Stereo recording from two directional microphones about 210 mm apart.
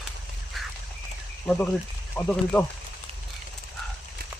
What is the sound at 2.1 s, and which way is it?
Speech, 10° left (ahead or behind).